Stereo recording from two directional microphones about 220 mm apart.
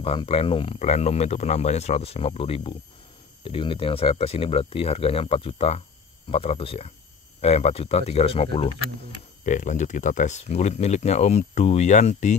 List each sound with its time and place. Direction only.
0.0 s speech: 25° left (ahead or behind)